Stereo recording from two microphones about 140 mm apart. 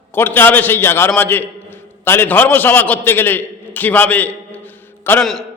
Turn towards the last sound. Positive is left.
turn(degrees=5)  # may be behind; listen again after turning